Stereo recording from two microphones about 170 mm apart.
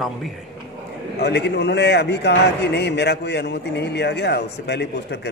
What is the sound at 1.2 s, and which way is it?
A man's voice, 80° left.